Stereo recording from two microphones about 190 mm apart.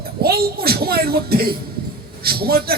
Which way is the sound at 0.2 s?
55° right (ahead or behind).